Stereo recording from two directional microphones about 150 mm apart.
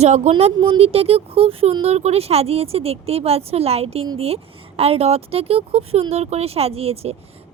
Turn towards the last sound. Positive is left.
turn(degrees=-40)  # may be behind; listen again after turning